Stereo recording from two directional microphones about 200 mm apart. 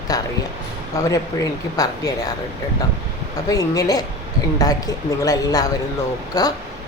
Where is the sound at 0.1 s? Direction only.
20° left (ahead or behind).